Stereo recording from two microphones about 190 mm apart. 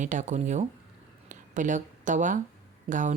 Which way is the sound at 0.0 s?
40° right (ahead or behind).